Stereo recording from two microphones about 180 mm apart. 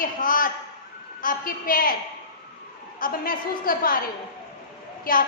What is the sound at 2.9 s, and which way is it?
A woman's voice, 50° left (ahead or behind).